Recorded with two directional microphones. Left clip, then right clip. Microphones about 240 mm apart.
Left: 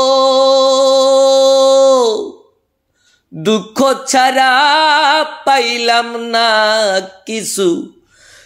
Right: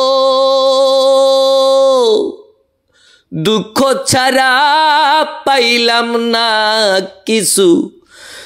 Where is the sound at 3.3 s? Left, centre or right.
Right.